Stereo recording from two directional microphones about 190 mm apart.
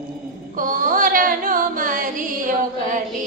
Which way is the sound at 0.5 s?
45° right (ahead or behind).